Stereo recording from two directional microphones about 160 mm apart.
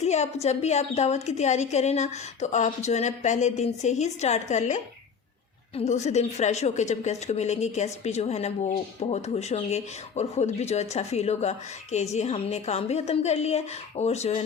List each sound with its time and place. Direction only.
0.0 s speech: 45° left (ahead or behind)